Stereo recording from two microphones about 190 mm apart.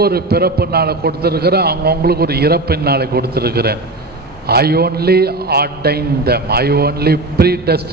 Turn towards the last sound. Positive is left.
turn(degrees=-55)  # may be behind; listen again after turning